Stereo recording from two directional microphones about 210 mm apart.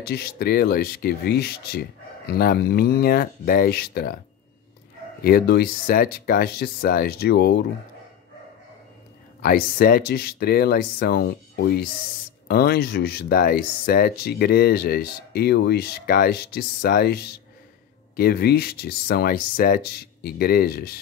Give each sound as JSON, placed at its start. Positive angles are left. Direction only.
{"t": 0.0, "sound": "speech", "side_deg": 50}
{"t": 5.2, "sound": "speech", "side_deg": 45}
{"t": 9.4, "sound": "speech", "side_deg": 45}